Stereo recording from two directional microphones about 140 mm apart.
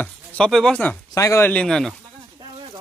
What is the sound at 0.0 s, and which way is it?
Chopping, 10° left (ahead or behind).